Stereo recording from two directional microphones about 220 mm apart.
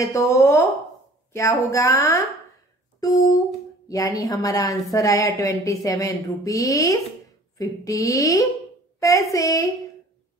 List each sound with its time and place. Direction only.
0.0 s a woman's voice: 15° left (ahead or behind)